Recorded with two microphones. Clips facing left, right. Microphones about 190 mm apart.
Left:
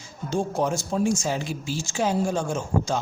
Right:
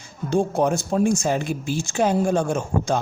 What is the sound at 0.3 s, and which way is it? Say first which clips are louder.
Speech: right 5 dB; 60° right (ahead or behind).